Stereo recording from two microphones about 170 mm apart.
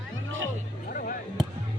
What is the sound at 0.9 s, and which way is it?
Music, 55° left (ahead or behind).